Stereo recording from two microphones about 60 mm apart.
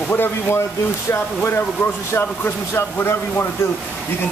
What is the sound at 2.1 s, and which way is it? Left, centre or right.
Speech, left.